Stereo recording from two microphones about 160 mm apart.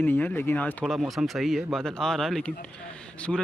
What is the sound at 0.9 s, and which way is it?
Speech, centre (ahead or behind).